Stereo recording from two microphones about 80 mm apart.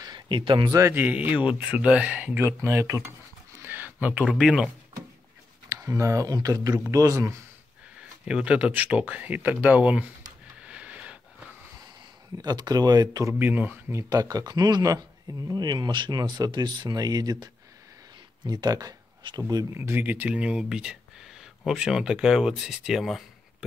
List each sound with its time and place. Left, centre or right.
0.0 s speech: right
0.9 s speech: right
2.4 s speech: right
3.6 s a sound: right
4.4 s speech: centre
5.7 s speech: right
6.2 s speech: right
8.3 s speech: centre
10.6 s a sound: centre
12.4 s speech: right
13.3 s speech: right
14.0 s speech: right
18.5 s speech: right
19.7 s speech: right; by 23.2 s centre